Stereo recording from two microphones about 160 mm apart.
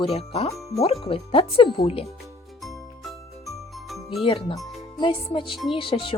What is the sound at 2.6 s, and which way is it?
Jingle, centre (ahead or behind).